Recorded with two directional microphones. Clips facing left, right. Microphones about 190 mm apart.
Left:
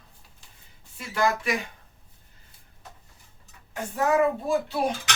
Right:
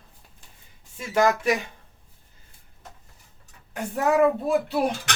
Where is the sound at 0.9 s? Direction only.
45° right (ahead or behind).